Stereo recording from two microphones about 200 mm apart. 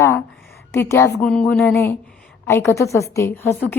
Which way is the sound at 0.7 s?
15° left (ahead or behind).